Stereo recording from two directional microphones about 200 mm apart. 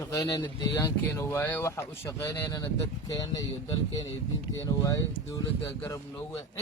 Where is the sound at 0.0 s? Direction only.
15° left (ahead or behind).